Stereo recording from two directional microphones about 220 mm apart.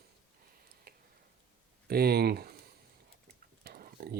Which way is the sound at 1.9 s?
45° right (ahead or behind).